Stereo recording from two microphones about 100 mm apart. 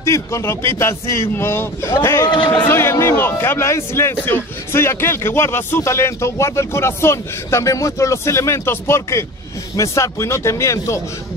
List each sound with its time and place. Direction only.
0.0 s a man's voice: 30° left (ahead or behind)
2.2 s speech: 55° left (ahead or behind)
2.7 s a man's voice: 25° left (ahead or behind)